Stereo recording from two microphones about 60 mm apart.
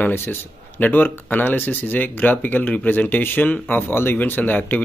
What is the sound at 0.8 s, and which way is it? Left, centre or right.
Speech, left.